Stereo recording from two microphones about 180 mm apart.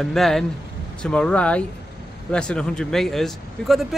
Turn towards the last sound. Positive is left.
turn(degrees=0)  # may be behind; listen again after turning